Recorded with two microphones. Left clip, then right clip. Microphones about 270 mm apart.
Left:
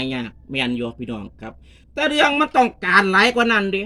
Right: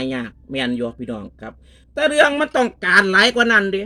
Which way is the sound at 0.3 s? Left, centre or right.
Centre.